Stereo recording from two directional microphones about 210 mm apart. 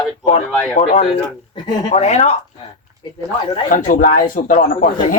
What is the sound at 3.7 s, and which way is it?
Speech, 40° left (ahead or behind).